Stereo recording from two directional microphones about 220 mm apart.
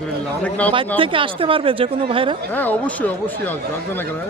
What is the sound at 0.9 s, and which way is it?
Speech, 25° right (ahead or behind).